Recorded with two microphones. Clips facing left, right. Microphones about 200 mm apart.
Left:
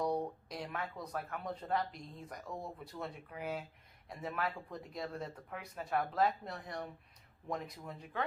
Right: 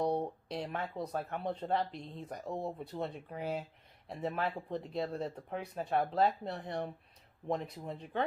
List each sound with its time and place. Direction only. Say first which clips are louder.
0.0 s speech: right 3 dB; 30° right (ahead or behind)